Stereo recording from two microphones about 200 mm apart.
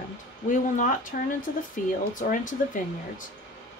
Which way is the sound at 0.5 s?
40° left (ahead or behind).